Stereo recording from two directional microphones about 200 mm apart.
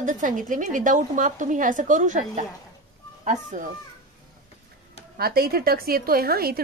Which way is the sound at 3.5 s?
40° right (ahead or behind).